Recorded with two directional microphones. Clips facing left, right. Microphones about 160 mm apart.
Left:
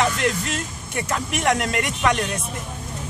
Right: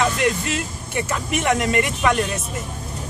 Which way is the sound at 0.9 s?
Centre (ahead or behind).